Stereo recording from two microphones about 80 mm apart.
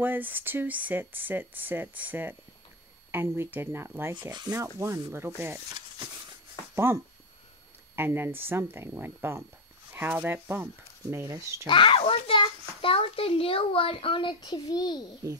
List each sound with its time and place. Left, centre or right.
0.0 s speech: right
6.7 s a sound: right
7.9 s speech: right
9.9 s speech: right
11.6 s a child's voice: left